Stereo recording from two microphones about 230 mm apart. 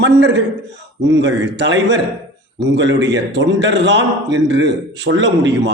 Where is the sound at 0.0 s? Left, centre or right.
Right.